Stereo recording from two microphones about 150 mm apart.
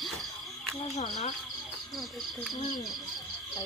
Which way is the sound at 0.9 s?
50° left (ahead or behind).